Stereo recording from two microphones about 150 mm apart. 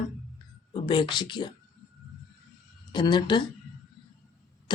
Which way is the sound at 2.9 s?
30° left (ahead or behind).